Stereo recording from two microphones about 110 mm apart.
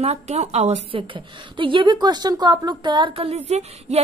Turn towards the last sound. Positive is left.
turn(degrees=-80)